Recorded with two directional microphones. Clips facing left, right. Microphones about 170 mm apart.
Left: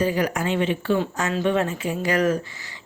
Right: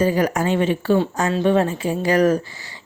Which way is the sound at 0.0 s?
40° right (ahead or behind).